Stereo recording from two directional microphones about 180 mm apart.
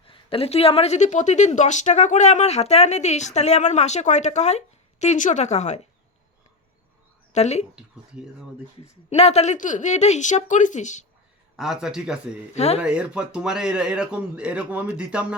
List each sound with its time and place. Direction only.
0.0 s a woman's voice: 30° left (ahead or behind)
7.3 s a woman's voice: 35° left (ahead or behind)
9.0 s a woman's voice: 35° left (ahead or behind)
11.5 s a man's voice: centre (ahead or behind)
12.5 s a woman's voice: 35° left (ahead or behind)
12.8 s a man's voice: 5° right (ahead or behind)